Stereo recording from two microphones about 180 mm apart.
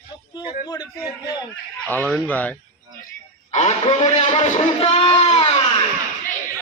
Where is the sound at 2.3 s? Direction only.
10° left (ahead or behind).